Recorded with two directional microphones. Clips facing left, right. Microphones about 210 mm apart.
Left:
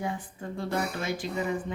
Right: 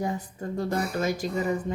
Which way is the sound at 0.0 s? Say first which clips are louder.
Right 4 dB; 40° right (ahead or behind).